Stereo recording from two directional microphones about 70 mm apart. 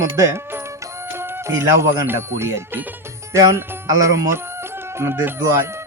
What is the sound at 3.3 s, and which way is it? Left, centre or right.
Music, right.